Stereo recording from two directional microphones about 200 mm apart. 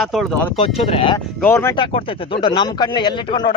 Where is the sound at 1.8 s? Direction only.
25° left (ahead or behind).